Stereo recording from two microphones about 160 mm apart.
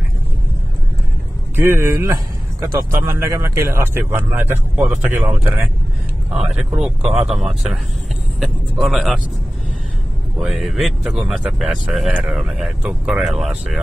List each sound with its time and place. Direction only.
1.6 s speech: 15° right (ahead or behind)
10.4 s speech: centre (ahead or behind)